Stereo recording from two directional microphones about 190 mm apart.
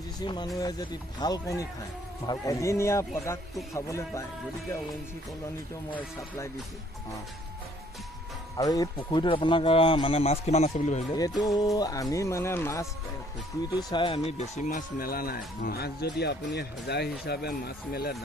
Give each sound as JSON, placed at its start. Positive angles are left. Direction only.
{"t": 0.6, "sound": "speech", "side_deg": 20}
{"t": 5.9, "sound": "speech", "side_deg": 15}
{"t": 8.5, "sound": "speech", "side_deg": 20}
{"t": 11.1, "sound": "speech", "side_deg": 20}
{"t": 15.0, "sound": "speech", "side_deg": 50}